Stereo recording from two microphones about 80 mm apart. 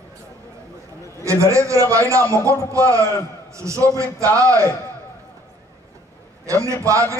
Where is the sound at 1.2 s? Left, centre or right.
Right.